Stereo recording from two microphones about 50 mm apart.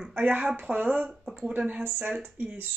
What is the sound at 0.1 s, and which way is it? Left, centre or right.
Speech, right.